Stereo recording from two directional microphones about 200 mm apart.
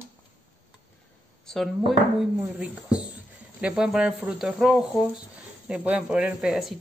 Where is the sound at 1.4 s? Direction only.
Centre (ahead or behind).